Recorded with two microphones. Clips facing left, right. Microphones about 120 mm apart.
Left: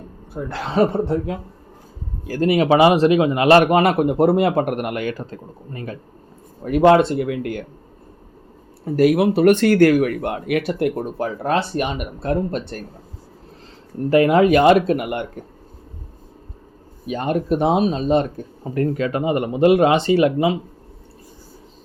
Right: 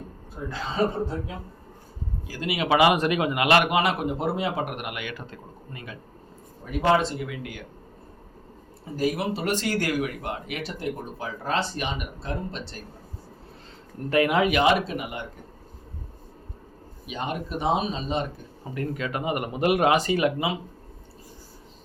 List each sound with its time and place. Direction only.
0.4 s a man's voice: 70° left (ahead or behind)
2.2 s a man's voice: 50° left (ahead or behind)
6.7 s speech: 60° left (ahead or behind)
8.8 s speech: 65° left (ahead or behind)
14.1 s speech: 30° left (ahead or behind); by 15.3 s 65° left (ahead or behind)
17.1 s speech: 50° left (ahead or behind)
18.7 s speech: 35° left (ahead or behind)